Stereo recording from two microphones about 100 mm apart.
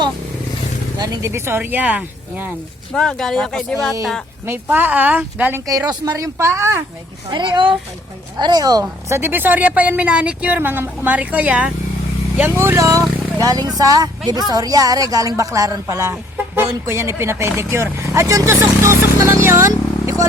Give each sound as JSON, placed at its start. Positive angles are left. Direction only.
{"t": 0.9, "sound": "speech", "side_deg": -40}
{"t": 2.9, "sound": "speech", "side_deg": 5}
{"t": 4.4, "sound": "speech", "side_deg": -20}
{"t": 5.6, "sound": "speech", "side_deg": -35}
{"t": 7.3, "sound": "a woman's voice", "side_deg": -50}
{"t": 9.0, "sound": "speech", "side_deg": -25}
{"t": 12.5, "sound": "a woman's voice", "side_deg": -25}